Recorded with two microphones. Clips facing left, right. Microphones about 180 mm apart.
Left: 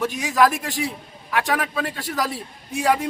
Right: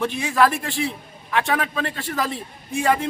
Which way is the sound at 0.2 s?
10° left (ahead or behind).